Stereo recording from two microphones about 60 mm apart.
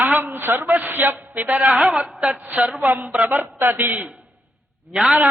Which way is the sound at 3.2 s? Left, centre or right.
Right.